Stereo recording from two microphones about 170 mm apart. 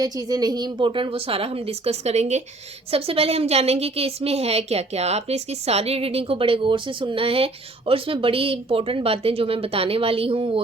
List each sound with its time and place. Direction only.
0.0 s a woman's voice: 20° right (ahead or behind)